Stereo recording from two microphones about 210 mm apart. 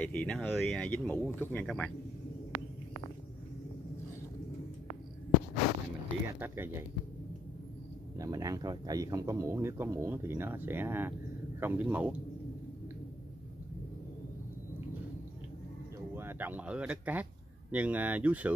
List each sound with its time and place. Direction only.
0.0 s speech: 5° left (ahead or behind)
6.4 s speech: 10° right (ahead or behind)
8.2 s speech: 15° right (ahead or behind)
16.2 s speech: 10° right (ahead or behind)